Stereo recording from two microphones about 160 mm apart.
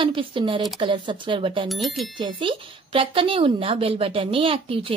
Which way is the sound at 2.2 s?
30° right (ahead or behind).